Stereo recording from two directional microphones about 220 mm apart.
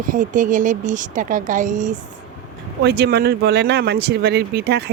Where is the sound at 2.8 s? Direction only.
50° right (ahead or behind).